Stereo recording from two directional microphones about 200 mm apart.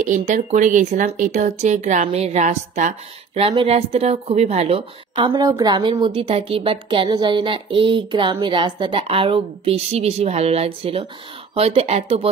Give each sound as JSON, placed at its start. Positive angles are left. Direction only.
{"t": 0.0, "sound": "speech", "side_deg": -35}